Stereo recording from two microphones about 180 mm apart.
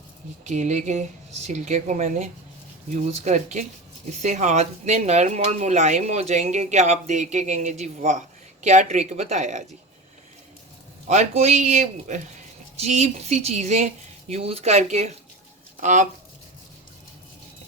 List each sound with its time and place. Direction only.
0.4 s speech: 40° right (ahead or behind)
11.1 s speech: 40° right (ahead or behind)